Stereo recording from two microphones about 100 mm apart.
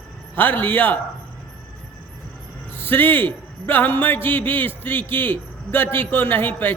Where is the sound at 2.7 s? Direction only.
20° left (ahead or behind).